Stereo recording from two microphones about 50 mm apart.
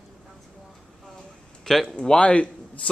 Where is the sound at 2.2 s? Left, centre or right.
Left.